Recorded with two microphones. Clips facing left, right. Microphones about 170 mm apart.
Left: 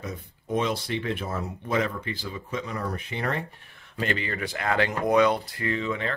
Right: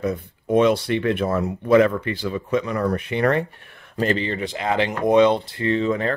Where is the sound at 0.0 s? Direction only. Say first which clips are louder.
Right 12 dB; 65° right (ahead or behind).